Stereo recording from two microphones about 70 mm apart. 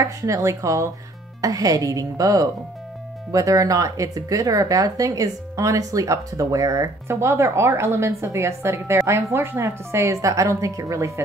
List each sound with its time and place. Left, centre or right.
0.0 s speech: right